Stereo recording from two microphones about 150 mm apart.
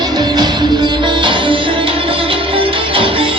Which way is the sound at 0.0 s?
25° right (ahead or behind).